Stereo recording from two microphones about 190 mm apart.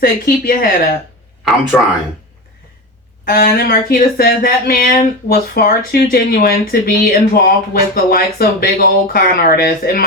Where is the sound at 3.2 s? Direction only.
50° left (ahead or behind).